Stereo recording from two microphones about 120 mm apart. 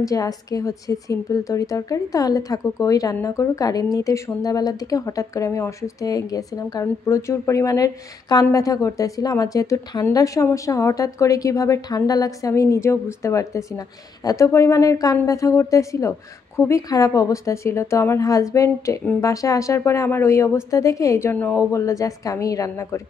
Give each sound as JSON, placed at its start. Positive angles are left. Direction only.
{"t": 0.0, "sound": "a woman's voice", "side_deg": 30}